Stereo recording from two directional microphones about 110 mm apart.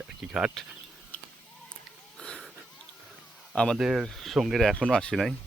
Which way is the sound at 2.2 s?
5° left (ahead or behind).